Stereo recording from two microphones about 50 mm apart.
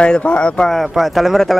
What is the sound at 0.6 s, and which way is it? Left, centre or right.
Speech, centre.